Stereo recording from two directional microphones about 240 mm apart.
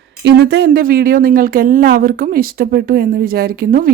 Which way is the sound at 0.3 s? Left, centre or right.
Right.